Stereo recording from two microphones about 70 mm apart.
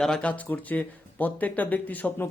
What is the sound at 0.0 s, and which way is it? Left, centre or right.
Speech, centre.